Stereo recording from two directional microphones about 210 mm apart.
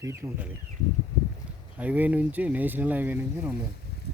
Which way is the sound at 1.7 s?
5° right (ahead or behind).